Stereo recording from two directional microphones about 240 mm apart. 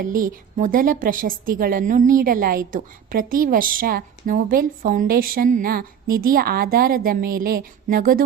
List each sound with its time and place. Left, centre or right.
0.0 s a woman's voice: right